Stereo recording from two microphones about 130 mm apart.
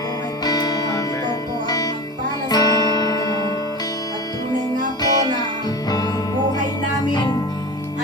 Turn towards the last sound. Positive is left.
turn(degrees=35)  # may be behind; listen again after turning